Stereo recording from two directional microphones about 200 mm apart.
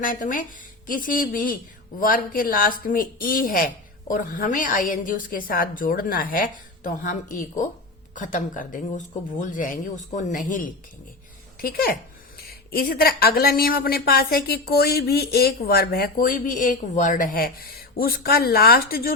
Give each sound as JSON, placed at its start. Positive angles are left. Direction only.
{"t": 0.0, "sound": "a woman's voice", "side_deg": 45}